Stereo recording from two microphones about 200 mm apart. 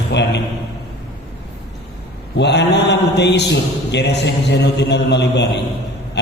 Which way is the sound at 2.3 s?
60° left (ahead or behind).